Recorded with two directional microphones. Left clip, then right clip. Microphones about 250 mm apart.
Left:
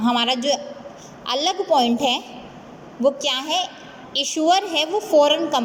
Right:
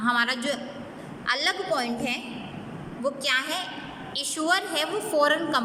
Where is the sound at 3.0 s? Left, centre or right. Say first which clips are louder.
Left 5 dB; centre.